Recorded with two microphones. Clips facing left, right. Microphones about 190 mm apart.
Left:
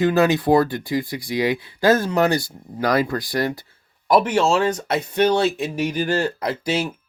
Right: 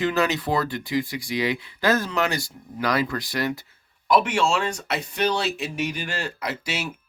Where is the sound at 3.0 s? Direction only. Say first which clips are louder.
Left 4 dB; 35° left (ahead or behind).